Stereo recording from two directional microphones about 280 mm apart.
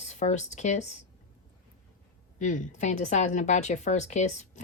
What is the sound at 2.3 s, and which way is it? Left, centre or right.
A woman's voice, left.